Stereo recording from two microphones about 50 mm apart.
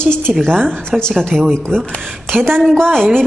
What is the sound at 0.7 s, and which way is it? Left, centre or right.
A woman's voice, centre.